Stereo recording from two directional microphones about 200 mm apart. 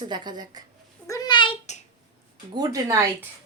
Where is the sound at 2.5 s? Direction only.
20° right (ahead or behind).